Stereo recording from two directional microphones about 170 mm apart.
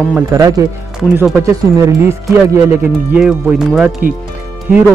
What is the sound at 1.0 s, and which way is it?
Speech, 5° right (ahead or behind).